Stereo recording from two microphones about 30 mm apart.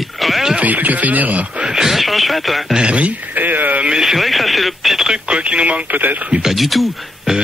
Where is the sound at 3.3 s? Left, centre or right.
Right.